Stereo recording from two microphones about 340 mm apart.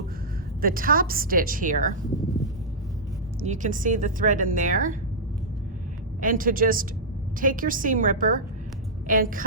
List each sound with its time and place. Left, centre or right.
0.6 s a woman's voice: right
3.4 s a woman's voice: right
6.1 s a woman's voice: right